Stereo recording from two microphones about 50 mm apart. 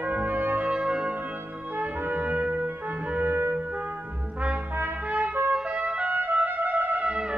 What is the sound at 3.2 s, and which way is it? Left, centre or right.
Music, right.